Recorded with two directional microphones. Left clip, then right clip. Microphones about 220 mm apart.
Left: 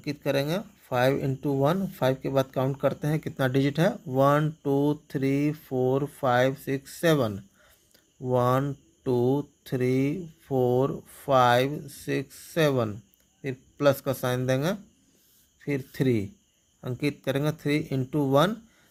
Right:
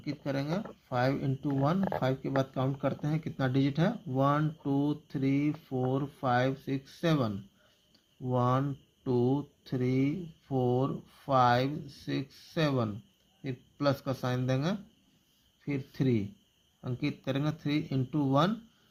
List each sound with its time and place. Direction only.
0.0 s speech: 40° left (ahead or behind)